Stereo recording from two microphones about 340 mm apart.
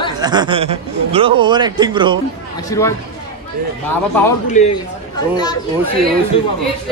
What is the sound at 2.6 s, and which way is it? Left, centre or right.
Speech, centre.